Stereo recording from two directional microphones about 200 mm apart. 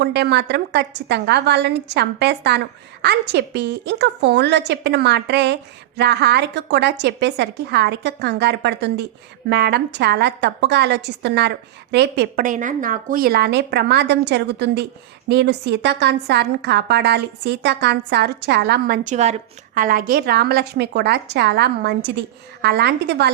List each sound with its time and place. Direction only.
0.0 s a woman's voice: 55° right (ahead or behind)
19.0 s a woman's voice: 35° right (ahead or behind); by 23.3 s 55° right (ahead or behind)